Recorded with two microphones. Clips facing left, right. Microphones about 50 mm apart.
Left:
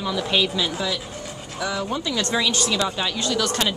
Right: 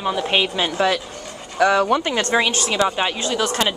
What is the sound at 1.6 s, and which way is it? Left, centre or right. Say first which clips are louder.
Speech: right 10 dB; right.